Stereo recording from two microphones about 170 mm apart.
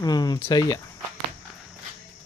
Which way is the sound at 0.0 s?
25° left (ahead or behind).